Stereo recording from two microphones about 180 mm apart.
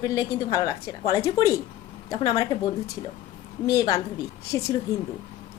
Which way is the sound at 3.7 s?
20° left (ahead or behind).